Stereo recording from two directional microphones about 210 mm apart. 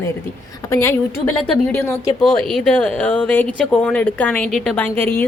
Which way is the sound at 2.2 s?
Centre (ahead or behind).